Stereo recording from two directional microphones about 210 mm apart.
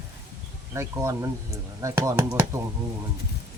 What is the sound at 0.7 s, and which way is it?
Speech, 15° right (ahead or behind).